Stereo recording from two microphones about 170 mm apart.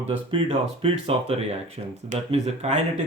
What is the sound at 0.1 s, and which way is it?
Speech, 30° right (ahead or behind).